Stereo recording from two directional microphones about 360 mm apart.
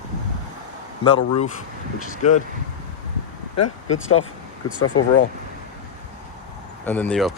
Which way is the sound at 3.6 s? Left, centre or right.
Left.